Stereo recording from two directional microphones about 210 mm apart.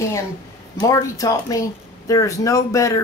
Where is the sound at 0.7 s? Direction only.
15° left (ahead or behind).